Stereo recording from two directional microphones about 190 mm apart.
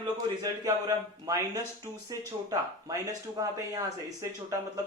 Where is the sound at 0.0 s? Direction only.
20° right (ahead or behind).